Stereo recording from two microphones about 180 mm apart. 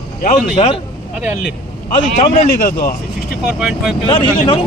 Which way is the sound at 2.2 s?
45° left (ahead or behind).